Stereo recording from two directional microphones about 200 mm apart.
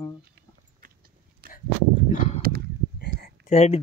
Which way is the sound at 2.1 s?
35° left (ahead or behind).